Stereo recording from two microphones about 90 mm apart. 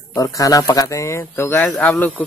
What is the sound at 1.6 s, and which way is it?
Speech, 15° left (ahead or behind).